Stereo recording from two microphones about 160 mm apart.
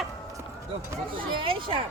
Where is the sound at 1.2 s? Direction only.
30° right (ahead or behind).